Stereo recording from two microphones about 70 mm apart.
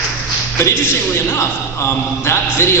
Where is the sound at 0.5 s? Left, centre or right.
Left.